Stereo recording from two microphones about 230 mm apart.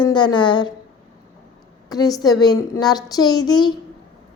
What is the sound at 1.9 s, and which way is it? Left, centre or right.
Child singing, centre.